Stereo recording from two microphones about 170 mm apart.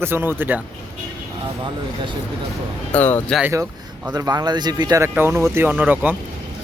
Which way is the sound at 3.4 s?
15° right (ahead or behind).